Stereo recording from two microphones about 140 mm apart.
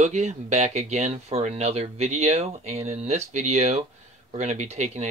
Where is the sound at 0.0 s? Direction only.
55° right (ahead or behind).